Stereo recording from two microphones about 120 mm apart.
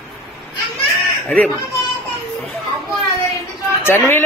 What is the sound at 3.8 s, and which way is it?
Speech, 20° left (ahead or behind).